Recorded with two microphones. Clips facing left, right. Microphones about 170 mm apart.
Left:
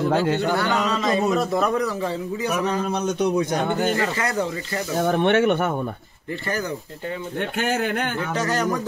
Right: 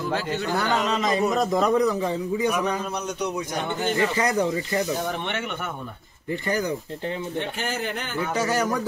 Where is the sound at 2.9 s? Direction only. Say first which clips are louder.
Left 6 dB; 60° left (ahead or behind).